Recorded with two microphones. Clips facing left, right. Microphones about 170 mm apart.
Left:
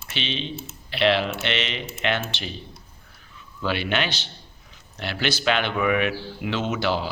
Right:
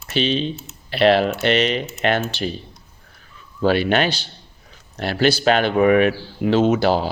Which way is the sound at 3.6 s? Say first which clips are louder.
Right 8 dB; 40° right (ahead or behind).